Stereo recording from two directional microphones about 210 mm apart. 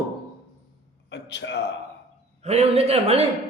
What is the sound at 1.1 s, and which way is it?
Speech, 55° left (ahead or behind).